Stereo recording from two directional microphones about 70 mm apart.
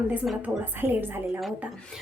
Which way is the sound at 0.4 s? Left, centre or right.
Right.